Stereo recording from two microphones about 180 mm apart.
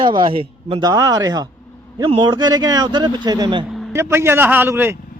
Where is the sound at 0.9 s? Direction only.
20° right (ahead or behind).